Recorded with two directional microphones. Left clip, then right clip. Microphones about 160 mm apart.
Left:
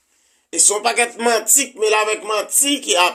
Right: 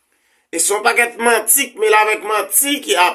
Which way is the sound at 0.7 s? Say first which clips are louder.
Right 6 dB; 35° left (ahead or behind).